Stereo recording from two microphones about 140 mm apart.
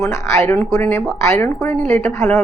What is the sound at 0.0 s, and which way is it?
A woman's voice, 20° left (ahead or behind).